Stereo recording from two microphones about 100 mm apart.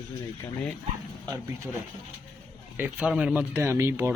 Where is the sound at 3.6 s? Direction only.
25° right (ahead or behind).